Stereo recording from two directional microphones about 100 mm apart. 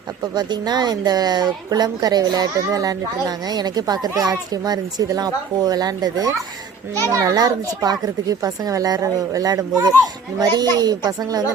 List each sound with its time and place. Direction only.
0.3 s a woman's voice: 45° right (ahead or behind)